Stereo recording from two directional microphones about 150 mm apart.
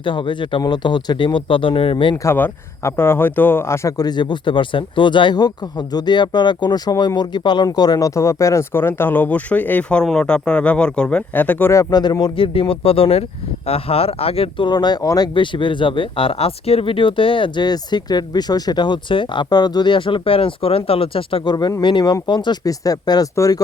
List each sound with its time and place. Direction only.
0.0 s speech: 35° left (ahead or behind)
2.2 s speech: 15° left (ahead or behind)